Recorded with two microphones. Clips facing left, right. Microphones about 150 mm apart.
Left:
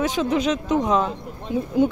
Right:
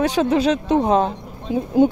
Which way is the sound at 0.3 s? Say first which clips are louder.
Right 4 dB; 35° right (ahead or behind).